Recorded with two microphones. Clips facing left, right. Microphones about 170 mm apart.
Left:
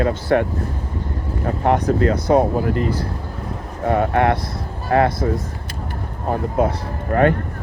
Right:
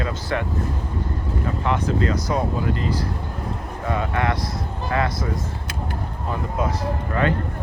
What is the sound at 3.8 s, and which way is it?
Speech, 55° left (ahead or behind).